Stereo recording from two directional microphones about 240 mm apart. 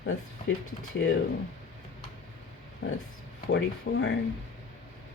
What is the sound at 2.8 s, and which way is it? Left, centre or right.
Speech, left.